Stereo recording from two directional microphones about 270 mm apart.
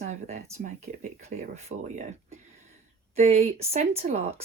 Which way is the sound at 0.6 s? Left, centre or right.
Right.